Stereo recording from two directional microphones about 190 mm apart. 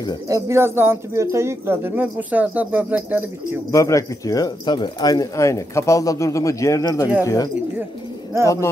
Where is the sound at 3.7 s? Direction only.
15° left (ahead or behind).